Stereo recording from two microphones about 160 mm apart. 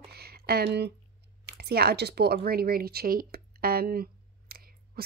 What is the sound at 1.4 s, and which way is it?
Speech, 85° right.